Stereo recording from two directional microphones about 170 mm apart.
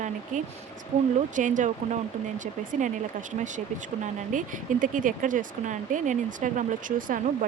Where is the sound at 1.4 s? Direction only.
50° right (ahead or behind).